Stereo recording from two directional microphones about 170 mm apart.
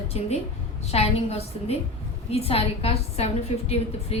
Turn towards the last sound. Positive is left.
turn(degrees=35)  # may be behind; listen again after turning